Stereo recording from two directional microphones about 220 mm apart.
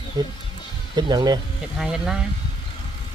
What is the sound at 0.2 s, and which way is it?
Speech, 20° right (ahead or behind).